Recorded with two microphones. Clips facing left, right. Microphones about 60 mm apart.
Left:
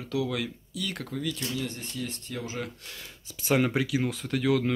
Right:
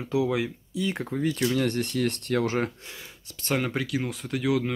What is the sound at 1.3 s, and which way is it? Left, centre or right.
Speech, right.